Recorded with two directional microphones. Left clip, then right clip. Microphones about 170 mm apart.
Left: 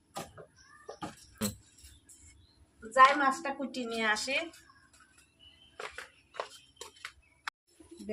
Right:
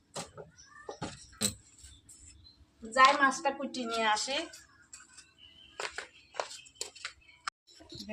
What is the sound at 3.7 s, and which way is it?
Speech, 25° left (ahead or behind).